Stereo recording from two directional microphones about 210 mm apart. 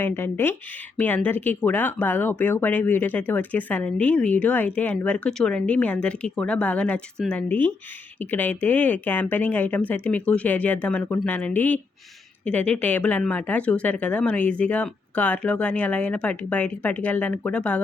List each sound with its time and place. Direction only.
0.0 s speech: 10° left (ahead or behind)